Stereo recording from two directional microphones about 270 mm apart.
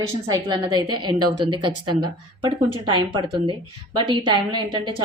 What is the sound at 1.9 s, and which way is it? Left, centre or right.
Speech, centre.